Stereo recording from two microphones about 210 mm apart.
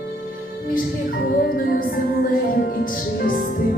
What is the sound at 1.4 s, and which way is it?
Music, 45° left (ahead or behind).